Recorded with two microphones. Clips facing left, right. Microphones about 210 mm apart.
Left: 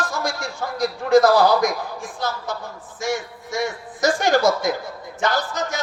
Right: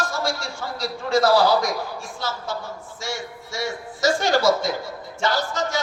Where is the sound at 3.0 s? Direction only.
15° left (ahead or behind).